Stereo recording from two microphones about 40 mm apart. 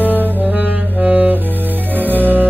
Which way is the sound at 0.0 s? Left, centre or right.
Right.